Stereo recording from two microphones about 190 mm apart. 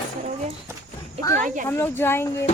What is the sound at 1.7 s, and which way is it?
Speech, 10° left (ahead or behind).